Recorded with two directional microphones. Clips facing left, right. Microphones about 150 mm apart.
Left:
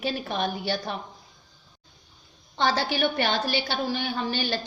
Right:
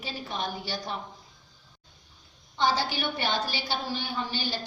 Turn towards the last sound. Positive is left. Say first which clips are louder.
# left 4 dB
turn(degrees=65)  # may be behind; listen again after turning